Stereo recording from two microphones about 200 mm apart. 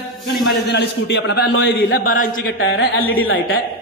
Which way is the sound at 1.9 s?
45° left (ahead or behind).